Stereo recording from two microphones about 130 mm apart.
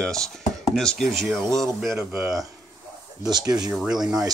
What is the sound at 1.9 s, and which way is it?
Speech, 20° right (ahead or behind).